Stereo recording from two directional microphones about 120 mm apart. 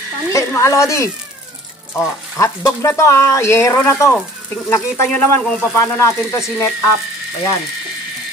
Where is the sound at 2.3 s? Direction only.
25° left (ahead or behind).